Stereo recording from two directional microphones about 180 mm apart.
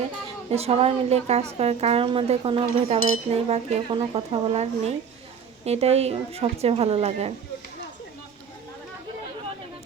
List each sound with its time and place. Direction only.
0.5 s a woman's voice: 35° right (ahead or behind)